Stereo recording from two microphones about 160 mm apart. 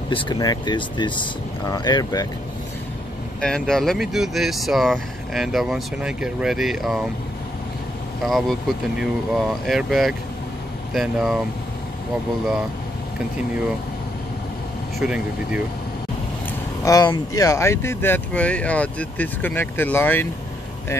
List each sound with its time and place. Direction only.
0.1 s speech: 30° left (ahead or behind)
3.3 s speech: 5° left (ahead or behind)
8.2 s speech: centre (ahead or behind)
15.0 s speech: 5° right (ahead or behind)
16.8 s speech: 25° left (ahead or behind)